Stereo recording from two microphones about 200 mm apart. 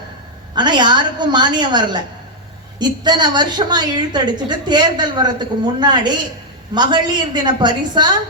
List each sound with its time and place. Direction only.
0.5 s a woman's voice: 20° right (ahead or behind)